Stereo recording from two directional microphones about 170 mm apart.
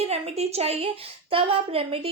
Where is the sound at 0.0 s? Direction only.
40° right (ahead or behind).